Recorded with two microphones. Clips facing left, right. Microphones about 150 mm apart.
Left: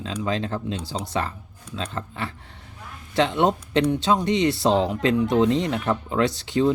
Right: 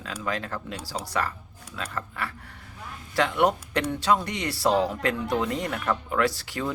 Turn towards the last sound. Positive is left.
turn(degrees=20)  # may be behind; listen again after turning